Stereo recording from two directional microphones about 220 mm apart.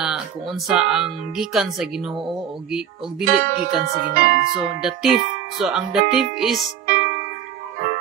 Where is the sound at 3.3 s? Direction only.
45° right (ahead or behind).